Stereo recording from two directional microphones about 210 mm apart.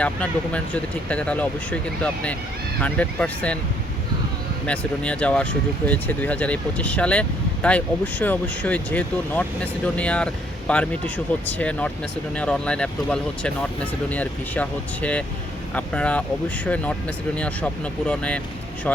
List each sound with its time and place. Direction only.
0.0 s speech: 5° left (ahead or behind)
4.6 s speech: 5° left (ahead or behind)